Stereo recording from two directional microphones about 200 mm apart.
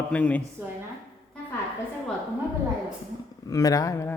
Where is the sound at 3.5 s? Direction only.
15° left (ahead or behind).